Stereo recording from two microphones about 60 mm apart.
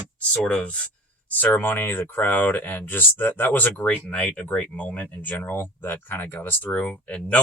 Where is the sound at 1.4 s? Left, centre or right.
Left.